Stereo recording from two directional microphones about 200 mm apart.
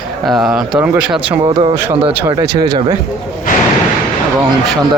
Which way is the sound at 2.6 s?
25° right (ahead or behind).